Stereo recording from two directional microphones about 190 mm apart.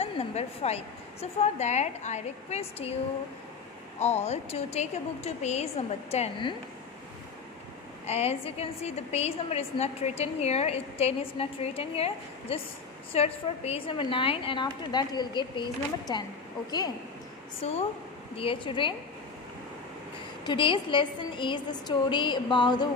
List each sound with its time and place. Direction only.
0.0 s a woman's voice: 35° left (ahead or behind)
4.0 s a woman's voice: 35° left (ahead or behind)
8.1 s a woman's voice: 30° left (ahead or behind)
17.6 s a woman's voice: 35° left (ahead or behind)
20.4 s a woman's voice: 25° left (ahead or behind)